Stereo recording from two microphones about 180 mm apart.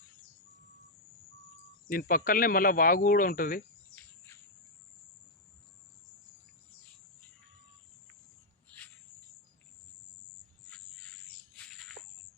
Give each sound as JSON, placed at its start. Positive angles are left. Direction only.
{"t": 1.9, "sound": "speech", "side_deg": 50}